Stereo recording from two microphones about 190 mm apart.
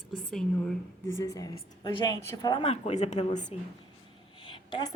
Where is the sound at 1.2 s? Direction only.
20° left (ahead or behind).